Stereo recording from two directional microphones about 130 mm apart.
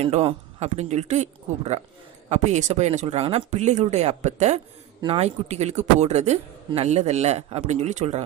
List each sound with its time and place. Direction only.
0.0 s a man's voice: 50° right (ahead or behind)
5.0 s a man's voice: 45° right (ahead or behind)
5.5 s a man's voice: 60° right (ahead or behind)